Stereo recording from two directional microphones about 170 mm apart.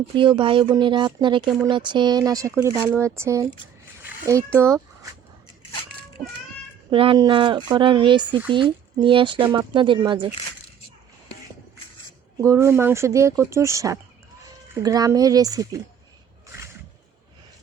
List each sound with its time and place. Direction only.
0.2 s speech: 30° right (ahead or behind)
4.0 s a sound: 15° right (ahead or behind)
4.5 s speech: 15° right (ahead or behind)
6.9 s speech: 30° right (ahead or behind)
12.4 s speech: 15° right (ahead or behind)